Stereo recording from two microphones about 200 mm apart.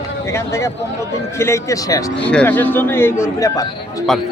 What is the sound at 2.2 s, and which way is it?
Speech, 5° left (ahead or behind).